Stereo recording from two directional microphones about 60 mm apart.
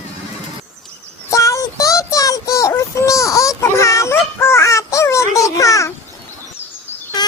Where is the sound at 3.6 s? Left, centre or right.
Left.